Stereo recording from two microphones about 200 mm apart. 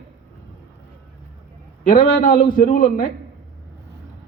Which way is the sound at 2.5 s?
40° left (ahead or behind).